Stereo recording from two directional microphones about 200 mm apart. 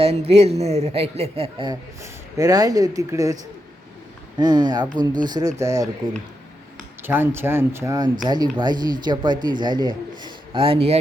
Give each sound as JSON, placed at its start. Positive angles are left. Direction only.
{"t": 0.0, "sound": "speech", "side_deg": -30}
{"t": 2.0, "sound": "speech", "side_deg": -15}
{"t": 4.4, "sound": "speech", "side_deg": -20}
{"t": 7.0, "sound": "speech", "side_deg": -10}